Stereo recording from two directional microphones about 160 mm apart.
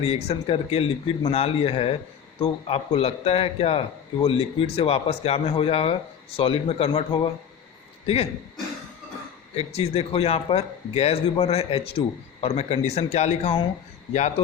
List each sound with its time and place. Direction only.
0.0 s a man's voice: 40° left (ahead or behind)
9.6 s a man's voice: 40° left (ahead or behind)